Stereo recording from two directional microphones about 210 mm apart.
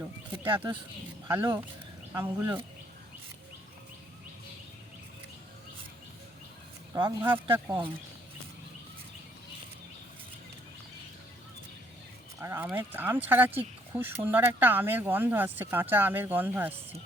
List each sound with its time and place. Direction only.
0.4 s speech: 25° right (ahead or behind)
1.3 s speech: 10° right (ahead or behind)
6.9 s speech: 15° right (ahead or behind)
12.4 s speech: 10° right (ahead or behind)